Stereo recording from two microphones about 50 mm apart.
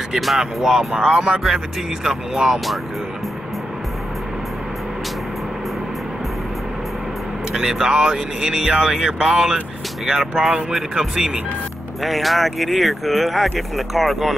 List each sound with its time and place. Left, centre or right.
0.1 s speech: centre
7.5 s speech: centre
12.0 s speech: centre